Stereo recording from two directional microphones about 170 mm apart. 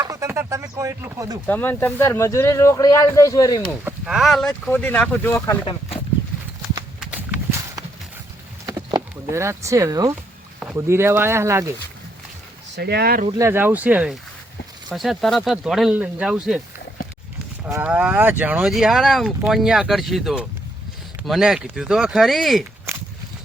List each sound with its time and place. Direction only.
0.0 s speech: 15° right (ahead or behind)
1.5 s speech: 10° left (ahead or behind)
3.8 s speech: 5° right (ahead or behind); by 5.5 s 10° left (ahead or behind)
7.0 s clip-clop: 10° right (ahead or behind)
9.3 s speech: 15° right (ahead or behind)
12.7 s speech: 70° right (ahead or behind)
13.4 s speech: 15° right (ahead or behind)
17.7 s speech: 10° right (ahead or behind)